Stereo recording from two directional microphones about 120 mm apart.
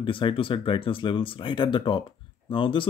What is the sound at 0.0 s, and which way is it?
Speech, 45° left (ahead or behind).